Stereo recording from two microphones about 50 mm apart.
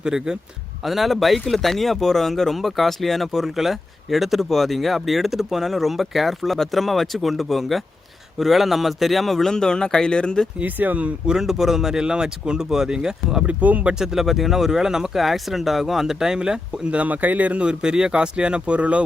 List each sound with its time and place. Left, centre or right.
0.0 s speech: centre
0.9 s speech: centre
10.6 s speech: right
11.3 s speech: centre
13.5 s speech: right
14.0 s speech: centre
16.9 s speech: right